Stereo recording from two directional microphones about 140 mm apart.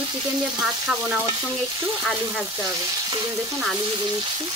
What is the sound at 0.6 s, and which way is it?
Speech, 10° right (ahead or behind).